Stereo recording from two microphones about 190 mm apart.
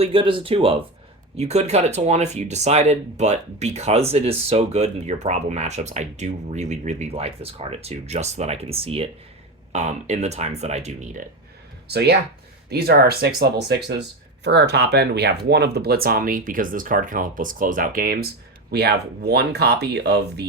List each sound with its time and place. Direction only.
0.0 s speech: 25° right (ahead or behind)
11.9 s speech: 60° right (ahead or behind)